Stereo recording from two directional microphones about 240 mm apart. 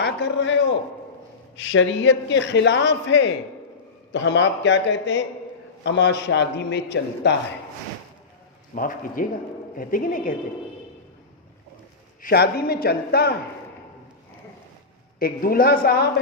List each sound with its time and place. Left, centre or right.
0.0 s a man's voice: left
8.7 s a man's voice: left
12.2 s a man's voice: left
15.2 s a man's voice: left